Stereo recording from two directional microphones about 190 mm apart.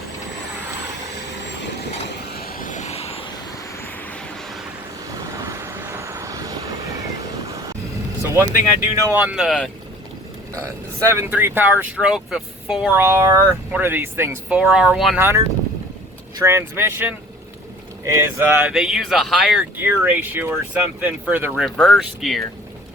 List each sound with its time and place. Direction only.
1.1 s vehicle: 65° left (ahead or behind); by 3.4 s 25° left (ahead or behind)
3.8 s vehicle: 10° left (ahead or behind)
5.0 s vehicle: 15° right (ahead or behind)
8.2 s speech: 15° right (ahead or behind)
10.5 s speech: 15° right (ahead or behind)
21.5 s speech: centre (ahead or behind)